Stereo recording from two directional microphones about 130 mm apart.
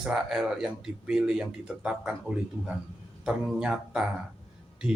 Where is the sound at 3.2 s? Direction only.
5° right (ahead or behind).